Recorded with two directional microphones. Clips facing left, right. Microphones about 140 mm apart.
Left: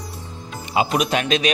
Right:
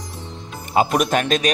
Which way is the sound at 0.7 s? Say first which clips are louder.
Right 2 dB; 50° right (ahead or behind).